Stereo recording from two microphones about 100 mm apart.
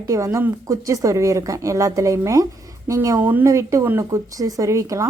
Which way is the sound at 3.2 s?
20° right (ahead or behind).